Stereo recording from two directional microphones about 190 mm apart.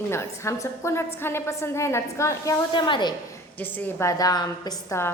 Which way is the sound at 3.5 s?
10° left (ahead or behind).